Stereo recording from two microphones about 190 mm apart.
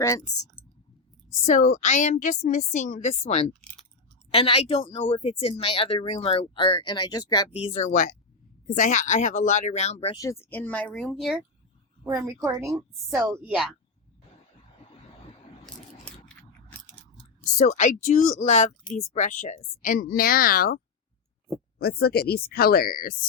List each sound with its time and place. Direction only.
0.0 s speech: 15° left (ahead or behind)
1.5 s a woman's voice: 40° left (ahead or behind); by 7.4 s 20° left (ahead or behind)
7.5 s a woman's voice: 30° left (ahead or behind)
10.2 s speech: 15° left (ahead or behind); by 11.4 s centre (ahead or behind)
12.4 s a woman's voice: 15° right (ahead or behind)
13.3 s a woman's voice: centre (ahead or behind)
17.6 s a woman's voice: 40° left (ahead or behind)